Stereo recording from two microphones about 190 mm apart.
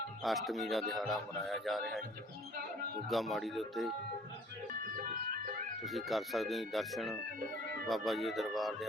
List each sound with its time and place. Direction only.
0.2 s speech: centre (ahead or behind)
3.1 s speech: centre (ahead or behind)
4.8 s ice cream truck: 50° right (ahead or behind)
5.8 s speech: centre (ahead or behind)